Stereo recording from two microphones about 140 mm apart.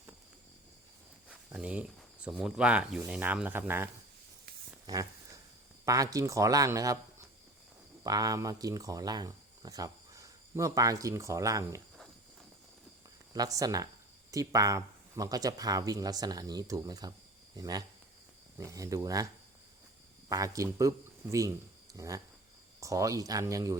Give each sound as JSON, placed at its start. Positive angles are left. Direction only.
{"t": 1.3, "sound": "a sound", "side_deg": -10}
{"t": 2.2, "sound": "speech", "side_deg": -5}
{"t": 4.9, "sound": "speech", "side_deg": -25}
{"t": 13.3, "sound": "speech", "side_deg": -25}
{"t": 20.3, "sound": "speech", "side_deg": -25}